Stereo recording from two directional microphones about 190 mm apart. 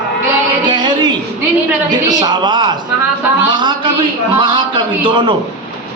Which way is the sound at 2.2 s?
25° right (ahead or behind).